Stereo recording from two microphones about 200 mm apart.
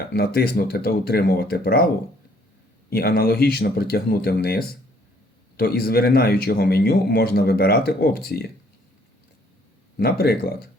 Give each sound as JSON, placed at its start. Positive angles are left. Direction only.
{"t": 0.1, "sound": "speech", "side_deg": 50}
{"t": 2.9, "sound": "speech", "side_deg": 50}
{"t": 10.0, "sound": "speech", "side_deg": 50}